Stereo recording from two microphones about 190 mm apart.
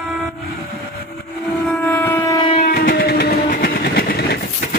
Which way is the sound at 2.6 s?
50° left (ahead or behind).